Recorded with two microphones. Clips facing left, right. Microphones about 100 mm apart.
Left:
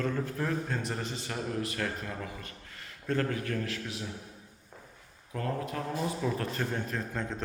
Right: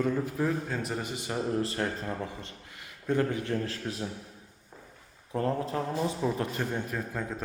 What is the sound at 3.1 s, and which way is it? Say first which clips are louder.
Speech: right 3 dB; 20° right (ahead or behind).